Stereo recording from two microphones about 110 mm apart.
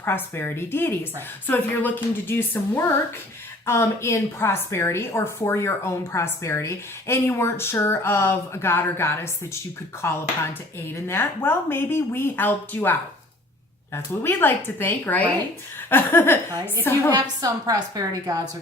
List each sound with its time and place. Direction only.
0.0 s a woman's voice: 20° left (ahead or behind)
17.1 s a woman's voice: 40° right (ahead or behind)